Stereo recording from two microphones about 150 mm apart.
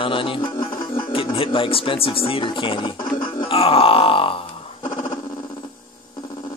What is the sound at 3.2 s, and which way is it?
Grunt, 35° left (ahead or behind).